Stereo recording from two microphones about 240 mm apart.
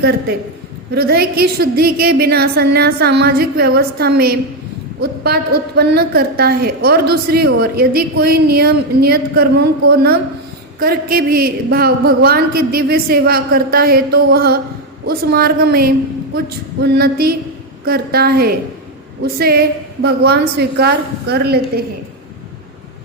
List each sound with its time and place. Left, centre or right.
0.9 s a woman's voice: right